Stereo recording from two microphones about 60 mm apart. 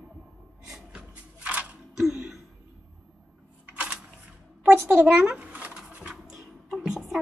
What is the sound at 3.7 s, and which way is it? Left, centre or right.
Camera, right.